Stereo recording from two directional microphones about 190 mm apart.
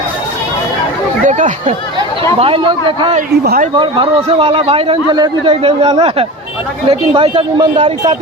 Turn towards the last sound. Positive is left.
turn(degrees=-30)  # may be behind; listen again after turning